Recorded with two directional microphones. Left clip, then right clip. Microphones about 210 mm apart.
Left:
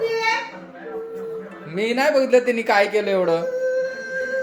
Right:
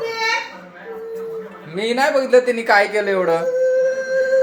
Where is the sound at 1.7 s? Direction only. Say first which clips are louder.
Right 1 dB; 20° left (ahead or behind).